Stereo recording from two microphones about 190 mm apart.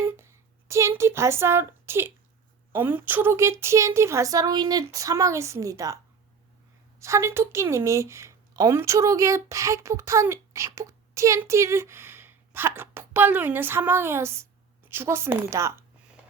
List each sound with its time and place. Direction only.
0.0 s speech: 10° right (ahead or behind)
7.0 s speech: 15° right (ahead or behind)